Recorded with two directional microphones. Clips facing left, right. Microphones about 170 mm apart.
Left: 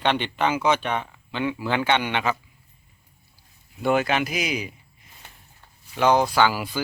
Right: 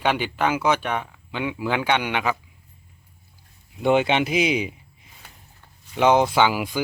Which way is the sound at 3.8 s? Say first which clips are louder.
Right 3 dB; 25° right (ahead or behind).